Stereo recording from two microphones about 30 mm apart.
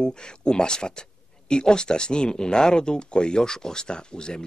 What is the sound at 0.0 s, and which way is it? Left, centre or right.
Speech, left.